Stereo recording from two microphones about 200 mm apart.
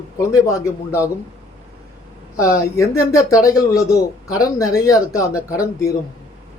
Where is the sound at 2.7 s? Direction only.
15° left (ahead or behind).